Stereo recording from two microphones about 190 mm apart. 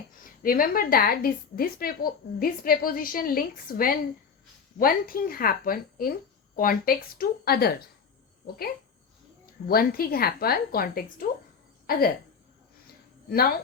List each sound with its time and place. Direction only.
0.4 s a woman's voice: 45° left (ahead or behind)
9.6 s a woman's voice: 50° left (ahead or behind)